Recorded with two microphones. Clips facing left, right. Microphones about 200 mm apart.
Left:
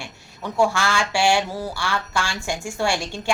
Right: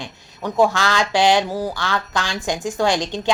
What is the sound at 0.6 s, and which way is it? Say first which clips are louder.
A woman's voice: right 3 dB; 20° right (ahead or behind).